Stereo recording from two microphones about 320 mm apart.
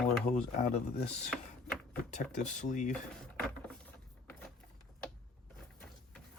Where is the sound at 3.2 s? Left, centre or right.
Centre.